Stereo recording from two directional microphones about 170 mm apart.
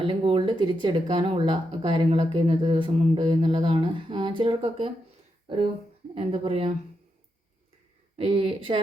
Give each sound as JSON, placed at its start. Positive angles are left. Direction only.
{"t": 0.0, "sound": "speech", "side_deg": -30}
{"t": 6.1, "sound": "speech", "side_deg": -35}
{"t": 8.1, "sound": "speech", "side_deg": -35}